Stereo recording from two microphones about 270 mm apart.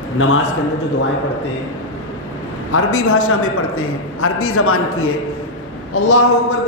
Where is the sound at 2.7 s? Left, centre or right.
Left.